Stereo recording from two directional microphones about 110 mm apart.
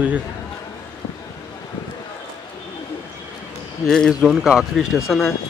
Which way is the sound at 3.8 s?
5° left (ahead or behind).